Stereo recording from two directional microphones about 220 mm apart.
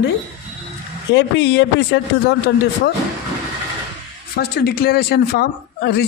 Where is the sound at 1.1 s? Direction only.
50° left (ahead or behind).